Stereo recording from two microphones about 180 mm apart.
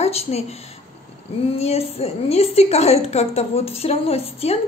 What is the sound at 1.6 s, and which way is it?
A woman's voice, 35° left (ahead or behind).